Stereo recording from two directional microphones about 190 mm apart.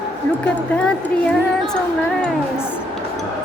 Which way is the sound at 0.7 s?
5° left (ahead or behind).